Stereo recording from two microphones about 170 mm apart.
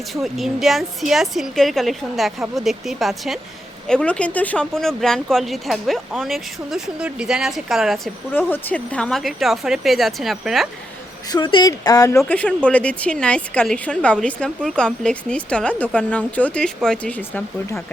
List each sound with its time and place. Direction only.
0.1 s speech: centre (ahead or behind)
8.3 s speech: 10° left (ahead or behind)
11.3 s a woman's voice: 25° left (ahead or behind); by 17.8 s 10° left (ahead or behind)